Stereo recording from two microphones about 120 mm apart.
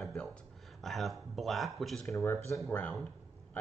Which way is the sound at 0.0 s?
5° left (ahead or behind).